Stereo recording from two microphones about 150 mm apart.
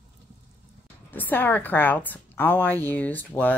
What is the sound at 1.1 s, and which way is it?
A woman's voice, 10° left (ahead or behind).